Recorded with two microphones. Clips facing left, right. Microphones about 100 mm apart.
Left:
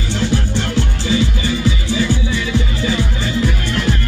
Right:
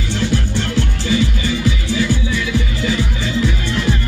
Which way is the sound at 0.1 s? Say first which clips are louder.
Left 1 dB; 15° left (ahead or behind).